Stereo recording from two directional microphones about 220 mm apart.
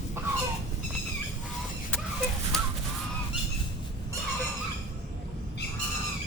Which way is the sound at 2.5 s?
Centre (ahead or behind).